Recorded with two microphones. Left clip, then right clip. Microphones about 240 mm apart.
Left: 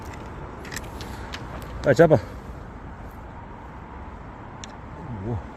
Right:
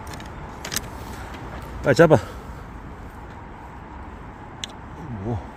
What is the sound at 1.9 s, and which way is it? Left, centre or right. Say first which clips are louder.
Speech: right 1 dB; centre.